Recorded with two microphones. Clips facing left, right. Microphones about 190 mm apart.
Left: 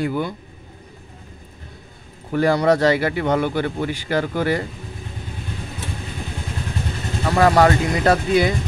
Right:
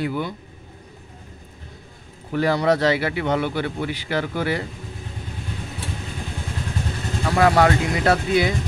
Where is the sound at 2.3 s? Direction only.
45° left (ahead or behind).